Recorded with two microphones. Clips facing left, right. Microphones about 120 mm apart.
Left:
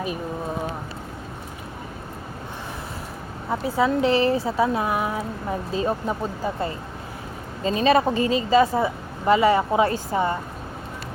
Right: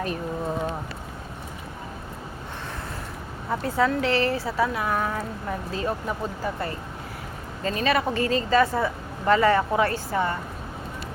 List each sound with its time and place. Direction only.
3.5 s speech: 10° left (ahead or behind)